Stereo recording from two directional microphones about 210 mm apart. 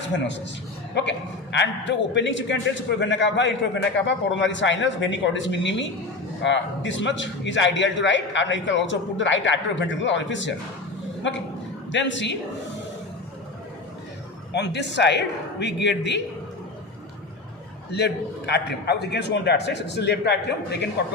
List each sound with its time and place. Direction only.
1.5 s a man's voice: 55° left (ahead or behind)
14.5 s a man's voice: 55° left (ahead or behind)
17.9 s a man's voice: 55° left (ahead or behind)